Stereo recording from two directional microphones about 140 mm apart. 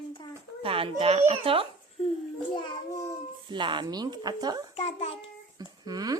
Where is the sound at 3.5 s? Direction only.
35° right (ahead or behind).